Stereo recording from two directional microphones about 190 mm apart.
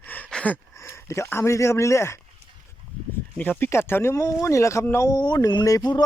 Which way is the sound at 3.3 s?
10° left (ahead or behind).